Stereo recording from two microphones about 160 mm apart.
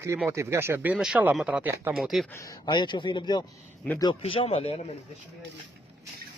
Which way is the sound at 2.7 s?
30° left (ahead or behind).